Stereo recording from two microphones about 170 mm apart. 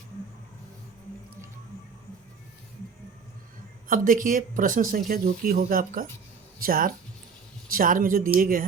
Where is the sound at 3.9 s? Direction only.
55° right (ahead or behind).